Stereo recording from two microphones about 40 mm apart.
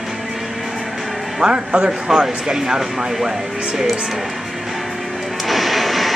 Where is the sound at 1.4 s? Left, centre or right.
Centre.